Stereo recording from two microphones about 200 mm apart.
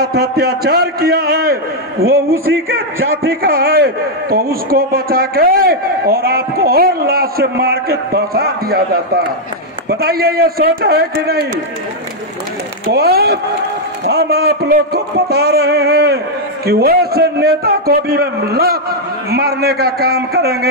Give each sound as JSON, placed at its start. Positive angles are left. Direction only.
{"t": 0.0, "sound": "a man's voice", "side_deg": -50}
{"t": 12.9, "sound": "a man's voice", "side_deg": -50}